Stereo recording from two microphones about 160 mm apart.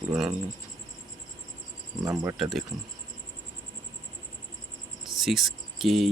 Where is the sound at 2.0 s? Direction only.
20° right (ahead or behind).